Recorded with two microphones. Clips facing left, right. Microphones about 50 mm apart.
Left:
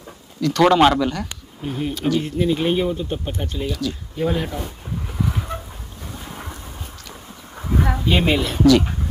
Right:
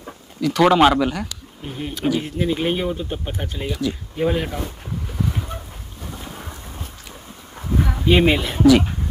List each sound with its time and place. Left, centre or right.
0.4 s speech: centre
8.0 s speech: centre